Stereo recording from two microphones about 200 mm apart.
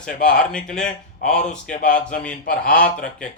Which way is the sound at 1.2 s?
35° left (ahead or behind).